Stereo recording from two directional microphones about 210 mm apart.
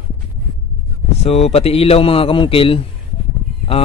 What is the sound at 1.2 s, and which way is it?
A man's voice, 30° left (ahead or behind).